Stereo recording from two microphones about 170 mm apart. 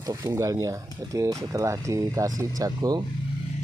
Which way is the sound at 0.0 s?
20° right (ahead or behind).